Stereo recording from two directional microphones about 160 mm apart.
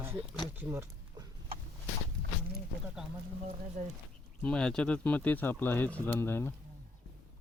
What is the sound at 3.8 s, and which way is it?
Speech, 50° right (ahead or behind).